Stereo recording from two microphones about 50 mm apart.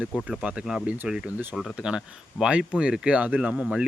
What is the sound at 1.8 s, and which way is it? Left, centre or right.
Speech, centre.